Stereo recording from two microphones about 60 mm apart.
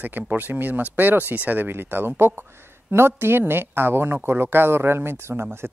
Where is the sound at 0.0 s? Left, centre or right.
Right.